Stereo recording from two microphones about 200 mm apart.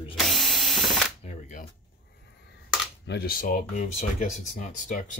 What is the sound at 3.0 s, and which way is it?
Speech, 50° left (ahead or behind).